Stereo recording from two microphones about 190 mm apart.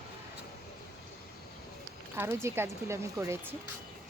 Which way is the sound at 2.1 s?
10° right (ahead or behind).